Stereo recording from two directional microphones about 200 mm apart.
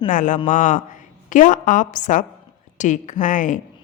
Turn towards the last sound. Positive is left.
turn(degrees=40)  # may be behind; listen again after turning